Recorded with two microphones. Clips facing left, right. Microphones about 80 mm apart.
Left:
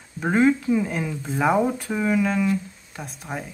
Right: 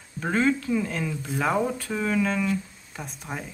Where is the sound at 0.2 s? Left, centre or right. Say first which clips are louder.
Left 4 dB; centre.